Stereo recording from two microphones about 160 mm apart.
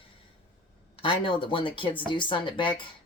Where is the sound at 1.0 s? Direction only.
35° left (ahead or behind).